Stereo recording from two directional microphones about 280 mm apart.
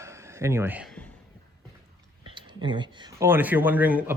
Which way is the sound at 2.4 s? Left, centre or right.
Centre.